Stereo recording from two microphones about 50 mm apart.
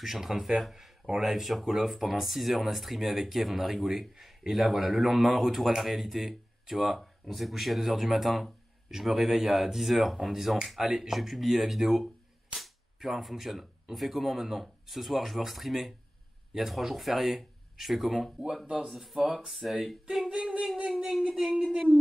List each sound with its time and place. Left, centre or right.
0.0 s speech: centre
12.5 s cap gun: centre
16.5 s speech: centre
20.2 s a sound: centre